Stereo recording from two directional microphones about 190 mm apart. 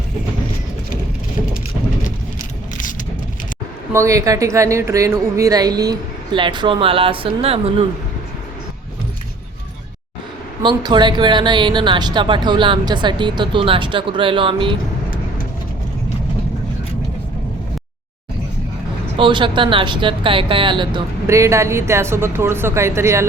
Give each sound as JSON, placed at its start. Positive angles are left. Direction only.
{"t": 3.9, "sound": "a woman's voice", "side_deg": -15}
{"t": 10.6, "sound": "a woman's voice", "side_deg": -25}
{"t": 19.1, "sound": "speech", "side_deg": -25}